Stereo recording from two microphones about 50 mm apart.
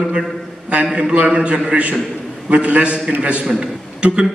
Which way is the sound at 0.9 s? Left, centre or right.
Right.